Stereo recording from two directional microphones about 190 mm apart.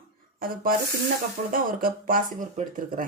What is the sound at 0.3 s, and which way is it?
Speech, 50° right (ahead or behind).